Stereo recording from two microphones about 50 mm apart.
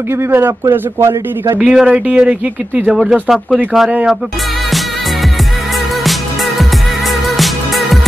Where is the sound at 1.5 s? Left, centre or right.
Centre.